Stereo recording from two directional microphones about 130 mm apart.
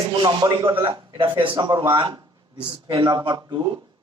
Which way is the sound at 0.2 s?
30° right (ahead or behind).